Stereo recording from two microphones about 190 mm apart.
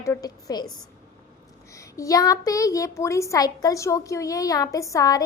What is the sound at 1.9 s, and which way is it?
A woman's voice, 15° left (ahead or behind).